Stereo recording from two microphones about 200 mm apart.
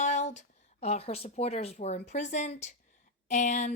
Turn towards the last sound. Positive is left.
turn(degrees=35)  # may be behind; listen again after turning